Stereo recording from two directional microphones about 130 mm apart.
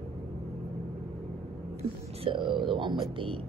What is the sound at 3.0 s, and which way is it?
Speech, 45° right (ahead or behind).